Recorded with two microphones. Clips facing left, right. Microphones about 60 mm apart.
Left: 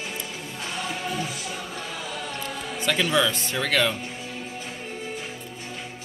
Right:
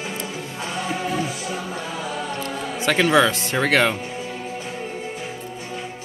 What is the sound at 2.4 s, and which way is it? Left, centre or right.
Music, right.